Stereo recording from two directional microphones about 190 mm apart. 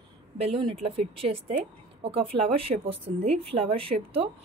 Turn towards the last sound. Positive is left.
turn(degrees=-30)  # may be behind; listen again after turning